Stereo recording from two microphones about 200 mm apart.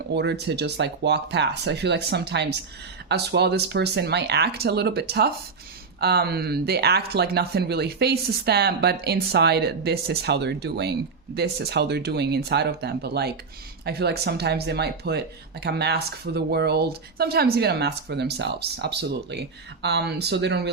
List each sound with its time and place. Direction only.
0.1 s speech: 55° right (ahead or behind)